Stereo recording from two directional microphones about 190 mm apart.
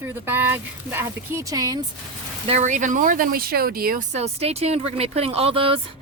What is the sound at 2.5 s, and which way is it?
Speech, 40° right (ahead or behind).